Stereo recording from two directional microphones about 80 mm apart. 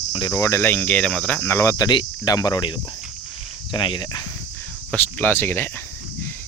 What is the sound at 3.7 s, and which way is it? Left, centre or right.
Speech, left.